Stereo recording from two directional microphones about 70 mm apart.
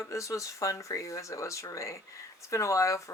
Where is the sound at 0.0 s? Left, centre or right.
Left.